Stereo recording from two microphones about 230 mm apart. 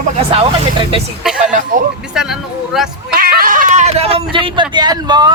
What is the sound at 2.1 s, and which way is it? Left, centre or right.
Speech, centre.